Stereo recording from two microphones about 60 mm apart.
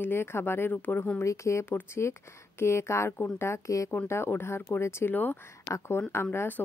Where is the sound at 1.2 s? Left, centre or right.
Left.